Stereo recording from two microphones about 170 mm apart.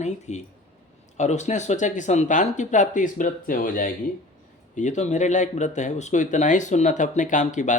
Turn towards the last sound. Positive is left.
turn(degrees=45)  # may be behind; listen again after turning